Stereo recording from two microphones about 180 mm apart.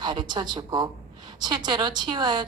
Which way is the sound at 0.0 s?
25° right (ahead or behind).